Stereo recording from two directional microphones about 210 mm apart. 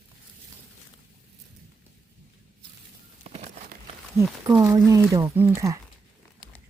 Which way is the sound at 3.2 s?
30° right (ahead or behind).